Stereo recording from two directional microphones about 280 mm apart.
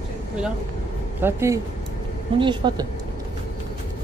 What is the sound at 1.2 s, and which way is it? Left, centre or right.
Speech, centre.